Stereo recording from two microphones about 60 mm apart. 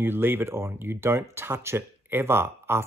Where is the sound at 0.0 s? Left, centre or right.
Right.